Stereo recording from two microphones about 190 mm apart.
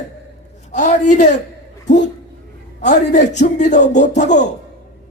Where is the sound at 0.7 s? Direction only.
40° left (ahead or behind).